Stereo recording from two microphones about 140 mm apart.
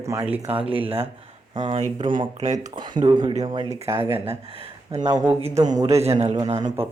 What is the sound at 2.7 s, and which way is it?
Speech, 35° right (ahead or behind).